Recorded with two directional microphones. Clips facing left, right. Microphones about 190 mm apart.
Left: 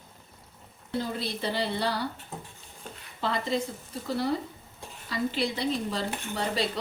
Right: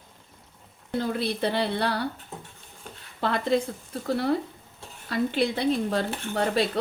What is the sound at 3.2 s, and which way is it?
Speech, 55° right (ahead or behind).